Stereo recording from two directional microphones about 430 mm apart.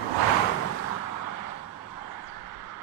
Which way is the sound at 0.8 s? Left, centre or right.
Left.